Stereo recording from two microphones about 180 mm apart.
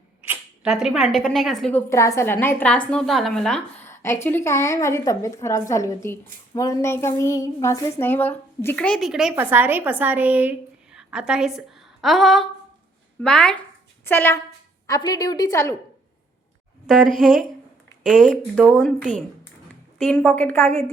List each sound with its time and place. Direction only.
0.3 s speech: 5° right (ahead or behind)
1.9 s a woman's voice: 15° left (ahead or behind)
3.8 s a woman's voice: 15° left (ahead or behind)
16.9 s speech: 5° left (ahead or behind)
20.0 s a woman's voice: 5° left (ahead or behind)